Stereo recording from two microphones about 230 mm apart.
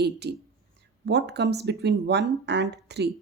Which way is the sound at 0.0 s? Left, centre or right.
Right.